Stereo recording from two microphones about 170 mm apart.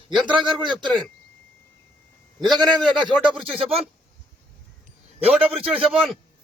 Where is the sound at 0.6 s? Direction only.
25° right (ahead or behind).